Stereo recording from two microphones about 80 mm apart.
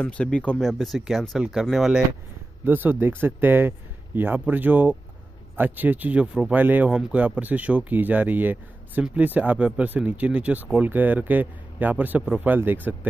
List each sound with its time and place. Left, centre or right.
0.0 s speech: centre
0.6 s speech: centre
2.6 s speech: right